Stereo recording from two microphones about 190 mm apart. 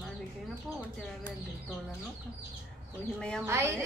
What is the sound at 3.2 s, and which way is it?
Speech, 5° left (ahead or behind).